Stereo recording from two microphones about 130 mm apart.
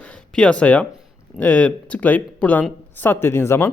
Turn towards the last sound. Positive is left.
turn(degrees=20)  # may be behind; listen again after turning